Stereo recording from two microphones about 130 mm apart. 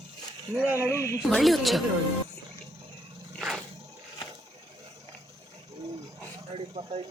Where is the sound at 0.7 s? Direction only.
20° left (ahead or behind).